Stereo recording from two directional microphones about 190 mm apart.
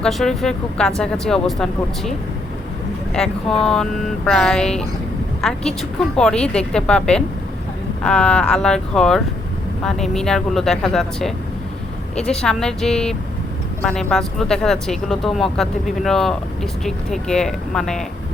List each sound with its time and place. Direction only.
0.0 s speech: centre (ahead or behind)
3.2 s a woman's voice: 5° left (ahead or behind)